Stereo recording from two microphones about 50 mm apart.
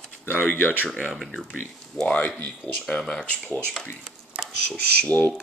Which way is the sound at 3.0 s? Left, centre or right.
Centre.